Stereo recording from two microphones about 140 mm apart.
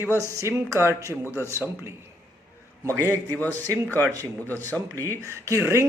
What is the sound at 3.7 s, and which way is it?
Speech, 10° left (ahead or behind).